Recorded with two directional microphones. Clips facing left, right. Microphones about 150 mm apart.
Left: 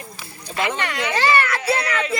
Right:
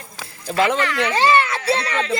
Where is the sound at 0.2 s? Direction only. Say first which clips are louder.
Right 8 dB; 90° right.